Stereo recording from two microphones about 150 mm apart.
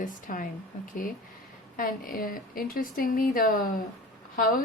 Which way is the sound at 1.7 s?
70° left (ahead or behind).